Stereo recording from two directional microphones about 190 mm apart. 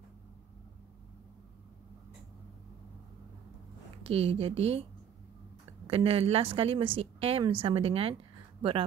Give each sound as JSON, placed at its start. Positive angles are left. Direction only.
{"t": 4.0, "sound": "speech", "side_deg": -30}
{"t": 5.9, "sound": "a woman's voice", "side_deg": -30}